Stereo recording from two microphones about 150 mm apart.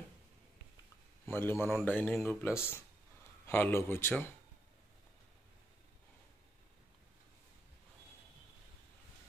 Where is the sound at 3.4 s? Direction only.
15° left (ahead or behind).